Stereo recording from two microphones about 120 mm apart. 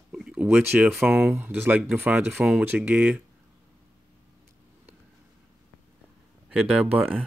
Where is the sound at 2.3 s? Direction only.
5° right (ahead or behind).